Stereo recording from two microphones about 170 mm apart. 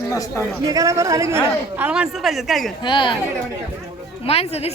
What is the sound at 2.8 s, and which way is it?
Speech, 30° left (ahead or behind).